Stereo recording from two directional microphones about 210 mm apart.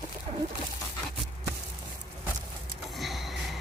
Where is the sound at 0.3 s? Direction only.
30° right (ahead or behind).